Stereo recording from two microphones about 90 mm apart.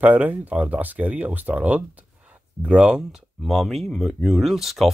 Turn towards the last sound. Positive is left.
turn(degrees=0)  # may be behind; listen again after turning